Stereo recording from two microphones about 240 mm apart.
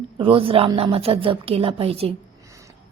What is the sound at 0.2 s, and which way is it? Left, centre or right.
A woman's voice, right.